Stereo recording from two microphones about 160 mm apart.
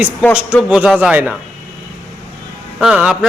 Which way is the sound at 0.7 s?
5° right (ahead or behind).